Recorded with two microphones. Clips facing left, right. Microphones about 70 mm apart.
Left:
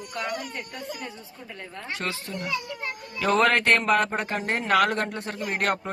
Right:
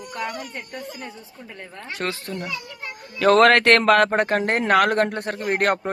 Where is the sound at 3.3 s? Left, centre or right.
Right.